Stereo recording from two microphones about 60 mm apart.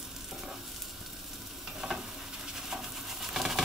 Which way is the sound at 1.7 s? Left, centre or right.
Centre.